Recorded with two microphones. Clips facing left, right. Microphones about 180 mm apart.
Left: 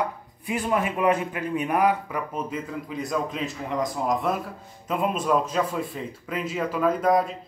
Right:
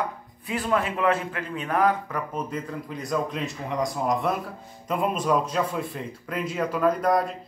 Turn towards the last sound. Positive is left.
turn(degrees=0)  # may be behind; listen again after turning